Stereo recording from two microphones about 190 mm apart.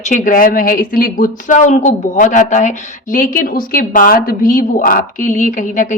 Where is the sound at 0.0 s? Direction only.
40° left (ahead or behind).